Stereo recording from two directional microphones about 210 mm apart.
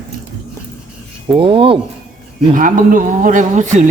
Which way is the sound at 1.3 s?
25° right (ahead or behind).